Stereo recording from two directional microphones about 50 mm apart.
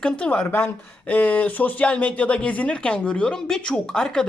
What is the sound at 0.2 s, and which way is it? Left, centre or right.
Speech, left.